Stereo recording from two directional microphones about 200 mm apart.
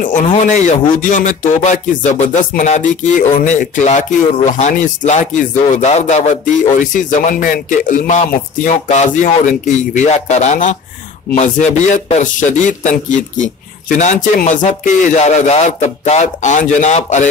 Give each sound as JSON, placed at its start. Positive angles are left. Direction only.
{"t": 0.3, "sound": "speech", "side_deg": 35}